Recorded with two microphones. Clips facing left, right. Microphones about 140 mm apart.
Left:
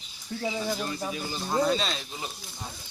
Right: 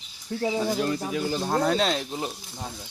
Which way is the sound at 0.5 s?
70° right (ahead or behind).